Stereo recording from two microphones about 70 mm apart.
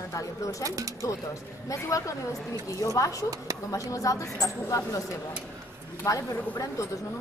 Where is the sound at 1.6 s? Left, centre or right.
Left.